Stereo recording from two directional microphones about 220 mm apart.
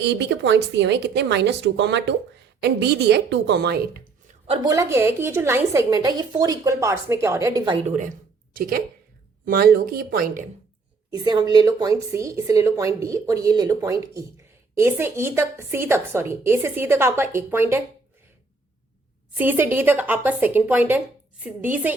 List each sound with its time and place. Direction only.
0.0 s speech: 50° right (ahead or behind)
4.4 s a woman's voice: 20° right (ahead or behind); by 10.4 s 40° right (ahead or behind)
11.1 s a woman's voice: 20° right (ahead or behind)
19.3 s a woman's voice: 10° right (ahead or behind)